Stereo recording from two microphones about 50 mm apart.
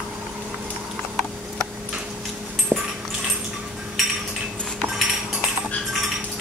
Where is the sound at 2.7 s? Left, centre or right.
Right.